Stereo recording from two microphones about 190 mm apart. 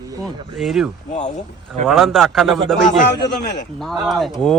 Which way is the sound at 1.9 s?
Centre (ahead or behind).